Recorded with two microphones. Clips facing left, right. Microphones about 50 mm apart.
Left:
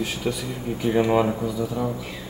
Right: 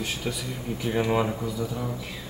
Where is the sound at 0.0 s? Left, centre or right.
Centre.